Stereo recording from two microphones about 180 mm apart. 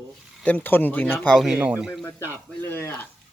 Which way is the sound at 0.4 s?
10° left (ahead or behind).